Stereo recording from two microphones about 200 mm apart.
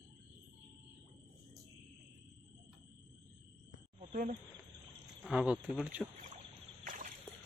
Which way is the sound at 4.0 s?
35° right (ahead or behind).